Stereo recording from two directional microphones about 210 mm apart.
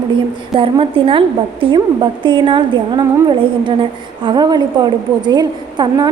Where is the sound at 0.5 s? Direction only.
25° right (ahead or behind).